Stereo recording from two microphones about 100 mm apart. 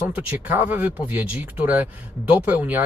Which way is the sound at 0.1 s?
15° right (ahead or behind).